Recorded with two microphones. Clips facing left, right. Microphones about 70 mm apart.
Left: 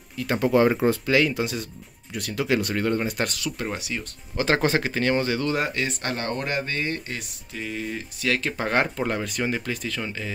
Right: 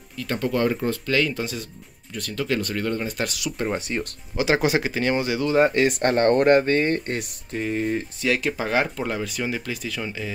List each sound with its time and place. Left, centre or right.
0.2 s speech: centre
3.3 s speech: centre
3.7 s speech: right
4.4 s speech: centre
6.0 s speech: right
7.6 s speech: right
8.3 s speech: centre